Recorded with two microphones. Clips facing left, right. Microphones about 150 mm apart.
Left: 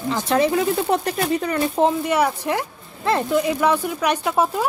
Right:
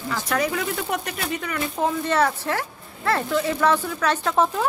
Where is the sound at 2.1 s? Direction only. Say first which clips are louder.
Left 2 dB; 10° left (ahead or behind).